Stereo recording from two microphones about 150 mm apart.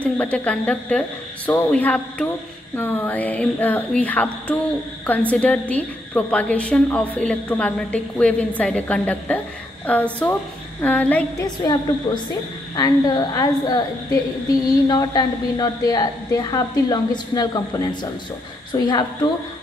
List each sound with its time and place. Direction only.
0.0 s a woman's voice: 10° left (ahead or behind)
11.4 s a woman's voice: 25° left (ahead or behind)